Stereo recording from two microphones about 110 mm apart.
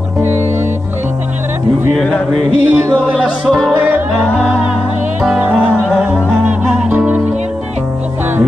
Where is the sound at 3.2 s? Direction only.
5° right (ahead or behind).